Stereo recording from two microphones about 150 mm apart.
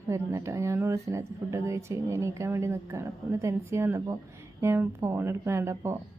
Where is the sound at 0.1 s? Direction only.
20° right (ahead or behind).